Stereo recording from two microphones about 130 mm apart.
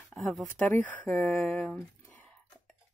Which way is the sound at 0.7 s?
15° left (ahead or behind).